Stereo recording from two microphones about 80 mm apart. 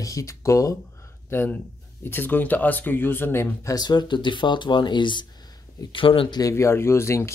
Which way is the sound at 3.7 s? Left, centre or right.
Left.